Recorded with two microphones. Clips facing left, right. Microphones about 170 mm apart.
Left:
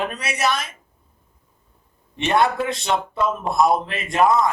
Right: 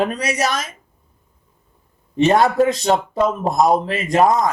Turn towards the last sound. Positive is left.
turn(degrees=-40)  # may be behind; listen again after turning